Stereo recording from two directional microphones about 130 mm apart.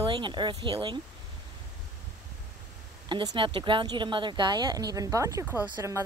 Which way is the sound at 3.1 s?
40° right (ahead or behind).